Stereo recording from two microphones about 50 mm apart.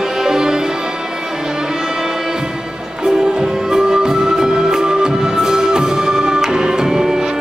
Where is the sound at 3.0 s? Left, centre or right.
Centre.